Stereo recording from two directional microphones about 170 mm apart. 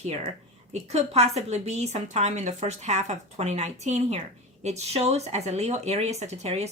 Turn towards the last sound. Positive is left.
turn(degrees=-40)  # may be behind; listen again after turning